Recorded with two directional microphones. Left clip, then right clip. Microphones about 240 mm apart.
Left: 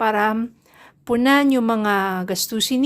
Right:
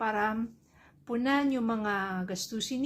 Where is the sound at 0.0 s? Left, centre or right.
Left.